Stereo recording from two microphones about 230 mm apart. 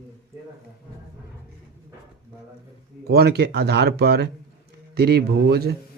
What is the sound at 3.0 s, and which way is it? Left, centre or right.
Speech, right.